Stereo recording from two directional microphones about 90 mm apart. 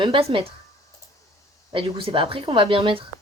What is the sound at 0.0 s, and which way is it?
Speech, 80° right.